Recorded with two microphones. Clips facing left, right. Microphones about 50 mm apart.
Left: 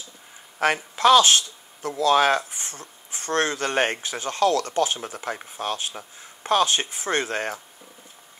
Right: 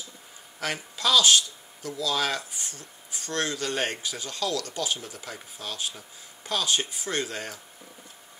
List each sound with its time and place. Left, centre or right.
0.6 s speech: left